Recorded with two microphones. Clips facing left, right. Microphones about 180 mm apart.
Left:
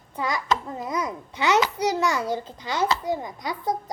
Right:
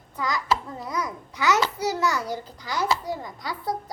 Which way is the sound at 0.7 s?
20° left (ahead or behind).